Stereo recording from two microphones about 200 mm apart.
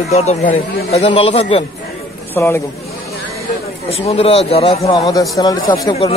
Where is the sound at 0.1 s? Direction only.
35° left (ahead or behind).